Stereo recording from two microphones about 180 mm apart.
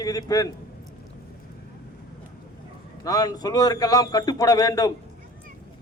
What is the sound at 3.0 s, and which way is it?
A man's voice, 20° left (ahead or behind).